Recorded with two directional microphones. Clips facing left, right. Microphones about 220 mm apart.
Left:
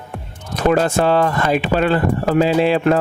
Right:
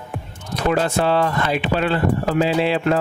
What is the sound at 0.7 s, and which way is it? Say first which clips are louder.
Speech: left 4 dB; 45° left (ahead or behind).